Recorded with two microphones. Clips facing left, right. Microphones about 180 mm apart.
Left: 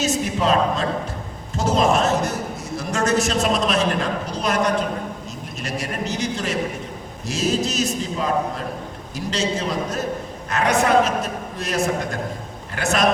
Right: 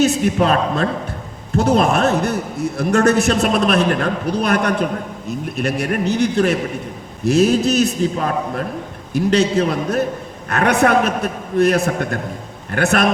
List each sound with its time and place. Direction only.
0.0 s a man's voice: 60° right (ahead or behind)